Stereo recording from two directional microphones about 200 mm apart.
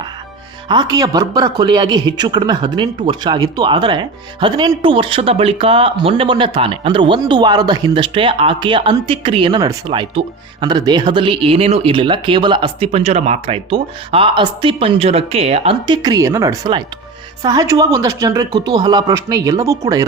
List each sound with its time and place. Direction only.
0.7 s speech: 20° right (ahead or behind)